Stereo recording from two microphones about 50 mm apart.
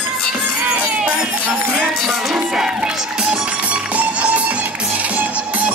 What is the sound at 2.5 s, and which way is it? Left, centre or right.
Music, centre.